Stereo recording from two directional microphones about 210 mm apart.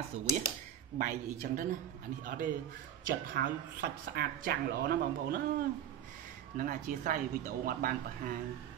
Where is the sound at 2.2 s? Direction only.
40° right (ahead or behind).